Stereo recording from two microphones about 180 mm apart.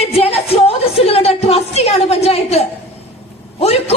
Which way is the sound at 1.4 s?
35° left (ahead or behind).